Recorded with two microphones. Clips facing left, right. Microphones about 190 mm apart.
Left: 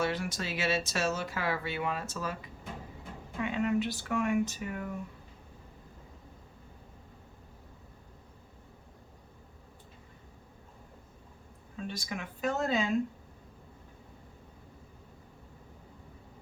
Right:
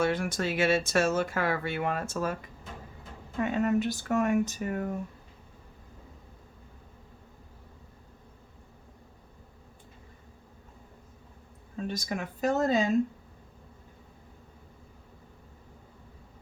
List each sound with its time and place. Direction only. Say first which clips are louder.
0.0 s speech: right 5 dB; 50° right (ahead or behind)
11.8 s speech: right 5 dB; 40° right (ahead or behind)